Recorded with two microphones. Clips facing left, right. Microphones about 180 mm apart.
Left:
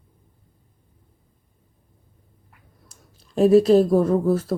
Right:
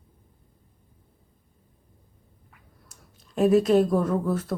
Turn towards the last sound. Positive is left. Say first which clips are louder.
# left 6 dB
turn(degrees=30)  # may be behind; listen again after turning